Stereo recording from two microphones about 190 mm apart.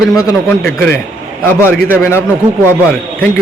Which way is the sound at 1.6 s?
10° left (ahead or behind).